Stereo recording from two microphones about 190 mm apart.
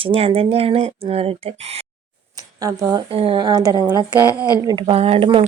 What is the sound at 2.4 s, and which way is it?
Speech, 20° right (ahead or behind).